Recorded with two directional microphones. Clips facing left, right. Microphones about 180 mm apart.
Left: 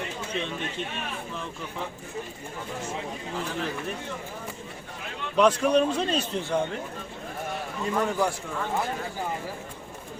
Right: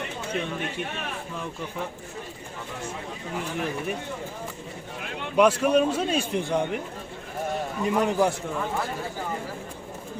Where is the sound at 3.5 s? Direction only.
15° right (ahead or behind).